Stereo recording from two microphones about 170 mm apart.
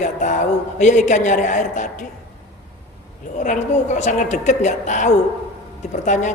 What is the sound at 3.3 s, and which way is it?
A man's voice, 45° left (ahead or behind).